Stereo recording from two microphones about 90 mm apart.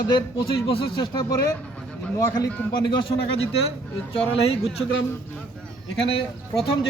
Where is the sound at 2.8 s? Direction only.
65° left (ahead or behind); by 4.2 s 90° left.